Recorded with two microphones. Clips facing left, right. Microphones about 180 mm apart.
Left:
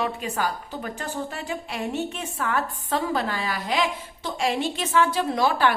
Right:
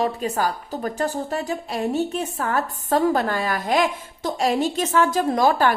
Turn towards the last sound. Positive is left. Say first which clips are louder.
# right 3 dB
turn(degrees=-45)  # may be behind; listen again after turning